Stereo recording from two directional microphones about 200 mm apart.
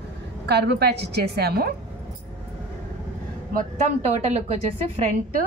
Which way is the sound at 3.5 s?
40° right (ahead or behind).